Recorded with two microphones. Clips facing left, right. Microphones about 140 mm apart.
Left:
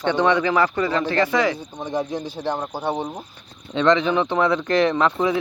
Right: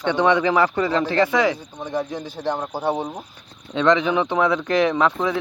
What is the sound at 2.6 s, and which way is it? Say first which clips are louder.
Speech: right 1 dB; 5° right (ahead or behind).